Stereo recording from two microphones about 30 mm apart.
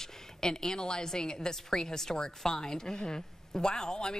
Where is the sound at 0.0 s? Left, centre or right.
Left.